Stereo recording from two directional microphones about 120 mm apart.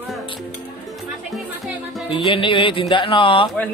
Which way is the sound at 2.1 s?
45° left (ahead or behind).